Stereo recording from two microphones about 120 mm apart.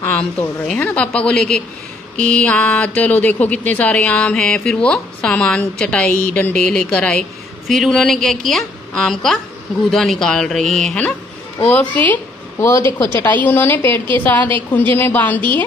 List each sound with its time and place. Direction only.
0.2 s a woman's voice: 10° left (ahead or behind)